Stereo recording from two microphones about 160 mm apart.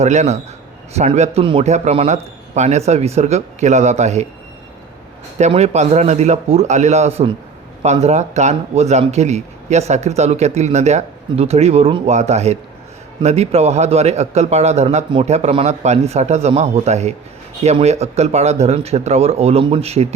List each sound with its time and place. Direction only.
0.0 s a man's voice: 45° right (ahead or behind)
5.4 s a man's voice: 40° right (ahead or behind)